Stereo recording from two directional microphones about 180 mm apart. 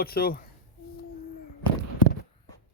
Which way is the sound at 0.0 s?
55° left (ahead or behind).